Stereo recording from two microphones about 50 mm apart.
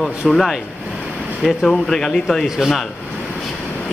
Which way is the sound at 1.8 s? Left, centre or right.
Centre.